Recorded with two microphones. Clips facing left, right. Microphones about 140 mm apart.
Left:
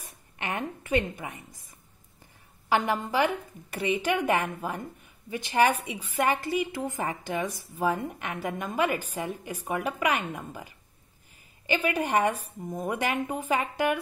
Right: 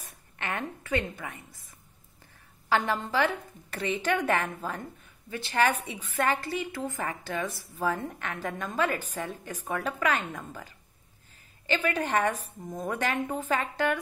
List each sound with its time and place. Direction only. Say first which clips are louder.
0.4 s a woman's voice: left 1 dB; 15° left (ahead or behind)
2.7 s a woman's voice: left 1 dB; 15° left (ahead or behind)